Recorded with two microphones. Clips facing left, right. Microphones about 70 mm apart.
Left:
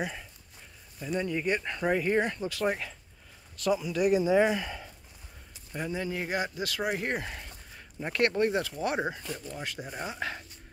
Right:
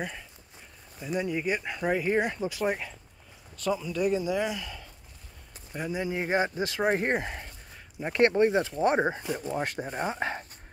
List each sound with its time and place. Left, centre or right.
0.0 s speech: centre
1.0 s speech: centre
3.6 s speech: centre
4.2 s speech: left
5.7 s speech: centre; by 7.2 s right
7.2 s a sound: centre
8.1 s speech: right